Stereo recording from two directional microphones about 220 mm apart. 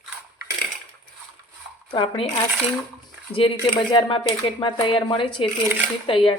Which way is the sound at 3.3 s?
25° left (ahead or behind).